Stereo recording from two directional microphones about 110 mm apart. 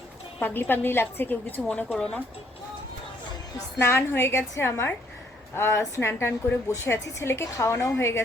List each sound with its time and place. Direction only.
0.3 s a woman's voice: 20° left (ahead or behind)
3.8 s a woman's voice: 25° left (ahead or behind)